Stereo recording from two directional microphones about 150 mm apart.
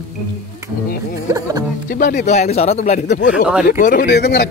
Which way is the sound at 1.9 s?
90° left.